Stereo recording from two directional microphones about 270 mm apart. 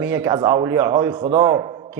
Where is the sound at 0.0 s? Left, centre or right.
Centre.